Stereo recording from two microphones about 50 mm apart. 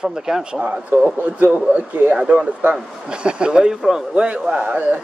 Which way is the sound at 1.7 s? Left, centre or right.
Right.